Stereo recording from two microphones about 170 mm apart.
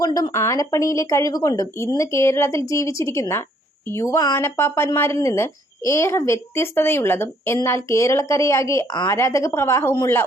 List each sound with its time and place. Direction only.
0.0 s speech: 20° left (ahead or behind)